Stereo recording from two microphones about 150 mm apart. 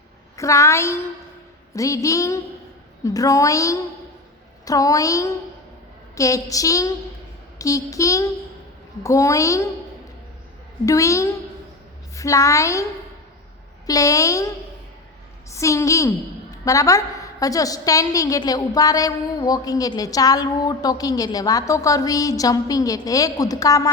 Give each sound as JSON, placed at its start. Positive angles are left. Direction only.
{"t": 0.3, "sound": "a woman's voice", "side_deg": 20}
{"t": 10.8, "sound": "a woman's voice", "side_deg": 20}